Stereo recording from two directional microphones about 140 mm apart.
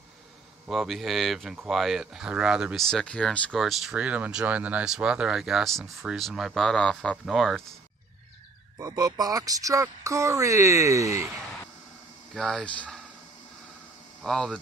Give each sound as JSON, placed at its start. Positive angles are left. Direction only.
{"t": 0.7, "sound": "speech", "side_deg": 0}
{"t": 8.7, "sound": "speech", "side_deg": -30}
{"t": 12.4, "sound": "speech", "side_deg": 5}
{"t": 14.2, "sound": "speech", "side_deg": 5}